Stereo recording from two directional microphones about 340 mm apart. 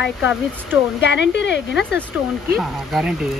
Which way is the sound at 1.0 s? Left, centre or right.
Left.